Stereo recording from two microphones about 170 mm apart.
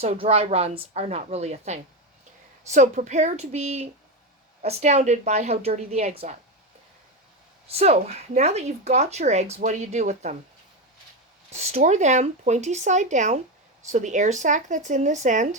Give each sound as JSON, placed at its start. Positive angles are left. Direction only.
{"t": 0.0, "sound": "a woman's voice", "side_deg": -35}
{"t": 7.7, "sound": "a woman's voice", "side_deg": -35}
{"t": 11.5, "sound": "speech", "side_deg": -40}